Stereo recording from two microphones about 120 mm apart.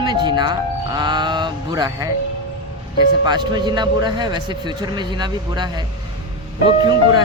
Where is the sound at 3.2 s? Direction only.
35° right (ahead or behind).